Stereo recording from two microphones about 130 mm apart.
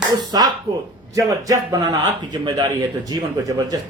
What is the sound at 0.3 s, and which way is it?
Speech, 35° right (ahead or behind).